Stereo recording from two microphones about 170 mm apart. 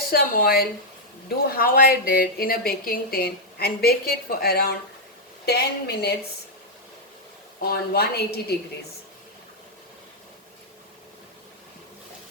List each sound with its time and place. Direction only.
0.1 s a woman's voice: 60° left (ahead or behind)
7.6 s a woman's voice: 65° left (ahead or behind)